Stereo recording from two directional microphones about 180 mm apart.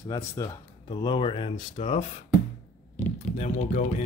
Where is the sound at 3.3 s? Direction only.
40° left (ahead or behind).